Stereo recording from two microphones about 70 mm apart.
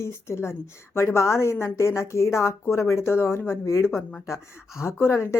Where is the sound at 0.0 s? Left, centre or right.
Left.